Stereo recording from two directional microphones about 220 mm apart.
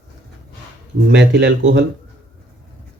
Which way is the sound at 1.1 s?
50° right (ahead or behind).